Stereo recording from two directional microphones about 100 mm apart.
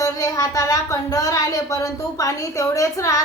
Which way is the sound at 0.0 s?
35° left (ahead or behind).